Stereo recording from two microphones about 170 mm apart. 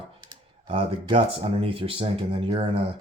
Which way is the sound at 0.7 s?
35° right (ahead or behind).